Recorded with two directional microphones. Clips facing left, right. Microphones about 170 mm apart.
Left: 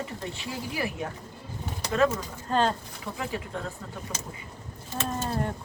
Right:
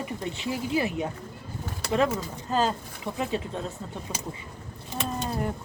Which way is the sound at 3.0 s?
20° right (ahead or behind).